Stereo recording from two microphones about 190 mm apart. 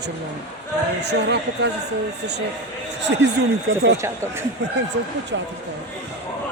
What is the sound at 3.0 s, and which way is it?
Speech, 65° right (ahead or behind).